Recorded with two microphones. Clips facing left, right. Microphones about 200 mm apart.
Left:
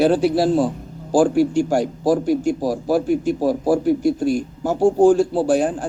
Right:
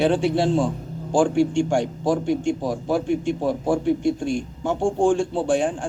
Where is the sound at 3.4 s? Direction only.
35° left (ahead or behind).